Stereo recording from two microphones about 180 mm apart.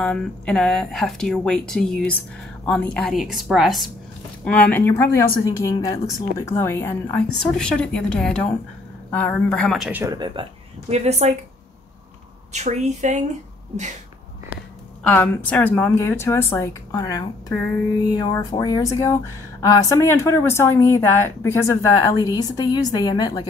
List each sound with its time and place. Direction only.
0.0 s speech: 5° left (ahead or behind)
10.0 s speech: 25° right (ahead or behind)
10.9 s a woman's voice: 35° right (ahead or behind)
12.5 s a woman's voice: 40° right (ahead or behind)
15.0 s speech: 10° left (ahead or behind)
18.4 s speech: 20° left (ahead or behind)